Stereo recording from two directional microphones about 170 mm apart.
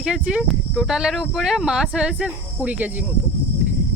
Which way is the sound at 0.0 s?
5° right (ahead or behind).